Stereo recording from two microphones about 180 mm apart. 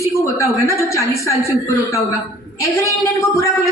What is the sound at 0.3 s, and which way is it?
Speech, 15° left (ahead or behind).